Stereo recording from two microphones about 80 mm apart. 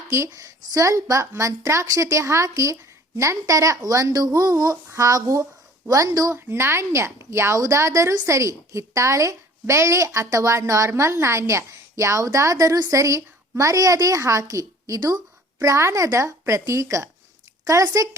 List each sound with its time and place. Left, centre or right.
0.3 s a woman's voice: right
6.3 s a woman's voice: right